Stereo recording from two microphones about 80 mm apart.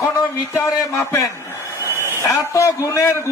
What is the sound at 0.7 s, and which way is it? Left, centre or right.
A man's voice, left.